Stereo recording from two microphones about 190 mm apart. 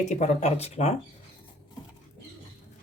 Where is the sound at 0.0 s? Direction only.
35° left (ahead or behind).